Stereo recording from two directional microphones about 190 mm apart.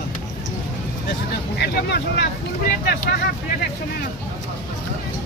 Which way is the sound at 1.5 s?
60° left (ahead or behind).